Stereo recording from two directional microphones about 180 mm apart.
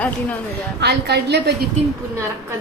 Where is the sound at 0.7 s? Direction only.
70° right (ahead or behind).